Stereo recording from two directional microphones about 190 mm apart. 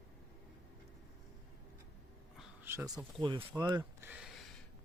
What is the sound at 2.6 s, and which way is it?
Speech, 15° right (ahead or behind).